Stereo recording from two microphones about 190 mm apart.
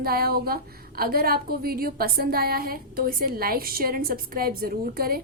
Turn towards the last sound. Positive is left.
turn(degrees=-50)  # may be behind; listen again after turning